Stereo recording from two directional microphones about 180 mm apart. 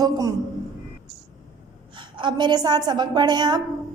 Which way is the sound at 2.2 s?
25° right (ahead or behind).